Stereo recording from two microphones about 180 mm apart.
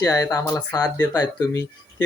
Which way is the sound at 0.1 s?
20° left (ahead or behind).